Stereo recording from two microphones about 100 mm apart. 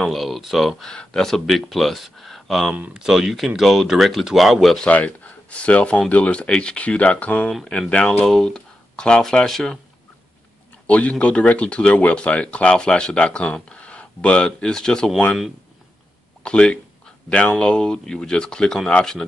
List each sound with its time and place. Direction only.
0.0 s speech: centre (ahead or behind)
2.7 s speech: 10° right (ahead or behind)
4.7 s speech: 15° left (ahead or behind)
8.3 s speech: 5° left (ahead or behind)
10.9 s speech: 15° left (ahead or behind)
16.4 s speech: 10° left (ahead or behind)